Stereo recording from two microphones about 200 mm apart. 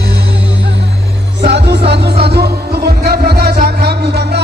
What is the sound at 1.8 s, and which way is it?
Music, 55° right (ahead or behind).